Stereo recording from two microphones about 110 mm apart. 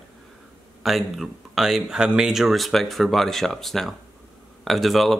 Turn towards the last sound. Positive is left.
turn(degrees=0)  # may be behind; listen again after turning